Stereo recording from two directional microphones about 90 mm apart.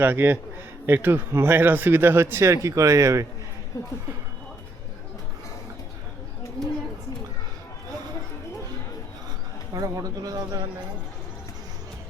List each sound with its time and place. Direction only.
0.0 s speech: 25° right (ahead or behind)
3.7 s speech: 40° left (ahead or behind)
9.7 s speech: 40° right (ahead or behind)